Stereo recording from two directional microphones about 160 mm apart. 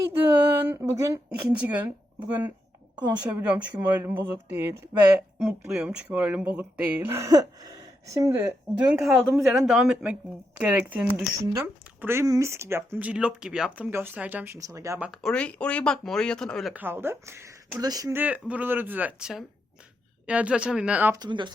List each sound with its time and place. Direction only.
0.6 s speech: 15° right (ahead or behind)
1.5 s speech: 10° right (ahead or behind)
5.4 s speech: 5° right (ahead or behind)
15.0 s speech: centre (ahead or behind)
16.7 s speech: 15° right (ahead or behind)
18.1 s speech: 10° right (ahead or behind)
21.2 s speech: 30° right (ahead or behind)